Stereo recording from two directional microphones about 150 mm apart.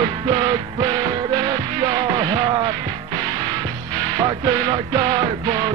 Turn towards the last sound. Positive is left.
turn(degrees=-30)  # may be behind; listen again after turning